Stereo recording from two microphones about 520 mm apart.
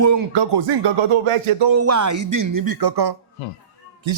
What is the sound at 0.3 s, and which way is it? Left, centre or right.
Music, right.